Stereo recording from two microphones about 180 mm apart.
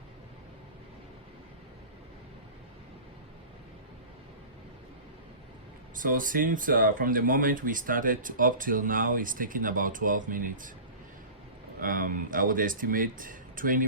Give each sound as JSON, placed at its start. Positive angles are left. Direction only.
{"t": 6.0, "sound": "speech", "side_deg": -50}
{"t": 11.8, "sound": "speech", "side_deg": -50}